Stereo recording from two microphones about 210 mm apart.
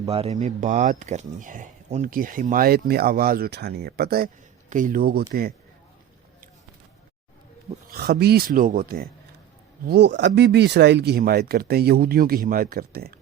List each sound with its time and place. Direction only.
0.1 s speech: 30° right (ahead or behind); by 5.5 s 45° right (ahead or behind)
7.9 s speech: 50° right (ahead or behind)